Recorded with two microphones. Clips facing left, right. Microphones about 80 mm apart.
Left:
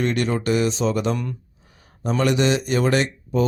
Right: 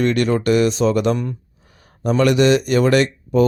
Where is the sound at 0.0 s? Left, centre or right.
Right.